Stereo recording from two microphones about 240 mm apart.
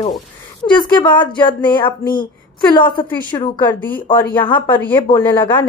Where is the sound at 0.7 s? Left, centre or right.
Centre.